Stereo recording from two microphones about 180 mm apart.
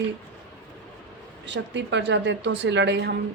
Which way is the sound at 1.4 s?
75° right (ahead or behind).